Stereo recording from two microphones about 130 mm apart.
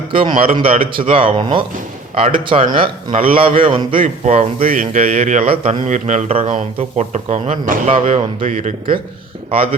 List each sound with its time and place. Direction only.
0.1 s a man's voice: 45° right (ahead or behind)
4.0 s a man's voice: 80° right
7.9 s speech: 65° right (ahead or behind); by 8.7 s 85° right